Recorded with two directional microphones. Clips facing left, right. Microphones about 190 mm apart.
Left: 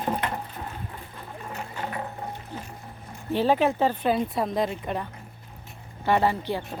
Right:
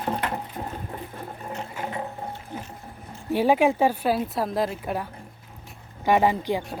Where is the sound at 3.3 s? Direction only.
10° right (ahead or behind).